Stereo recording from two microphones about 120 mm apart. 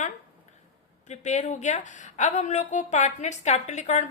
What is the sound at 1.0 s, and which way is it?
A woman's voice, 75° left (ahead or behind).